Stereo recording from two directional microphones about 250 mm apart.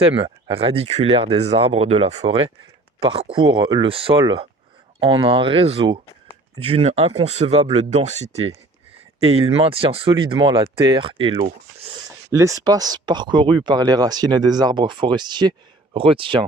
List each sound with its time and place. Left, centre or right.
0.0 s speech: right